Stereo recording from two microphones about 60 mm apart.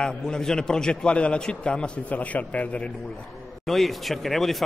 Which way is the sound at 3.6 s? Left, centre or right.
Centre.